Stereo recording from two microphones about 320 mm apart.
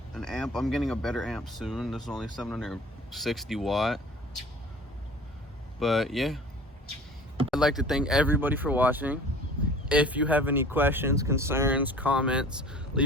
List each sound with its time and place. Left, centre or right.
0.1 s speech: centre
5.8 s speech: centre
7.5 s speech: centre